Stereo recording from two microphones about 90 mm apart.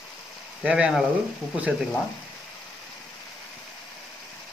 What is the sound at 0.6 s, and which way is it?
Speech, 10° right (ahead or behind).